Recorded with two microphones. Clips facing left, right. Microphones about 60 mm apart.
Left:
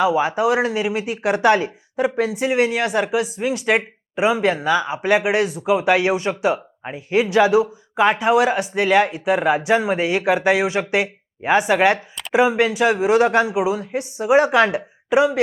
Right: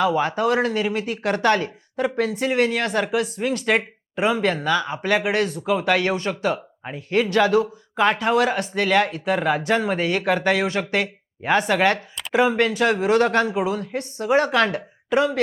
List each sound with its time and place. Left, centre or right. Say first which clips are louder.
0.0 s speech: left 2 dB; centre